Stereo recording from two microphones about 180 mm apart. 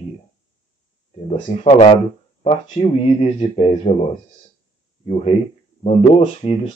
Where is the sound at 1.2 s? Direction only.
30° left (ahead or behind).